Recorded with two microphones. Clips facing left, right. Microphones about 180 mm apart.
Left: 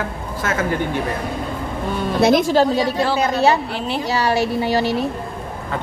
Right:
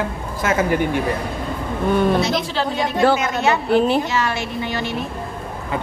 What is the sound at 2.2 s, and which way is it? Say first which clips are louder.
A woman's voice: left 7 dB; 50° left (ahead or behind).